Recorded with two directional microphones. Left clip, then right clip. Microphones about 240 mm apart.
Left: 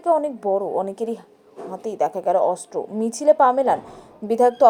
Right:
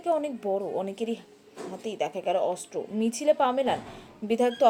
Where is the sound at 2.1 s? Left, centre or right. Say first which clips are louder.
Left 7 dB; left.